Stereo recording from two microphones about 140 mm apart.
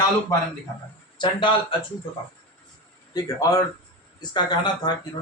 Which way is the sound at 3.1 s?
25° left (ahead or behind).